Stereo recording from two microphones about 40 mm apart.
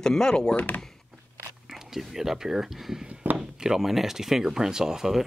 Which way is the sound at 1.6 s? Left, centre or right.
Centre.